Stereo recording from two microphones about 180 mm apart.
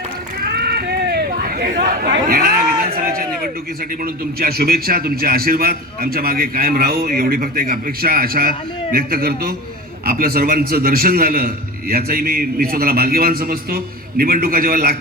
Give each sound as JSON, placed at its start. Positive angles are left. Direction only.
{"t": 0.4, "sound": "chatter", "side_deg": -60}
{"t": 4.0, "sound": "a man's voice", "side_deg": -55}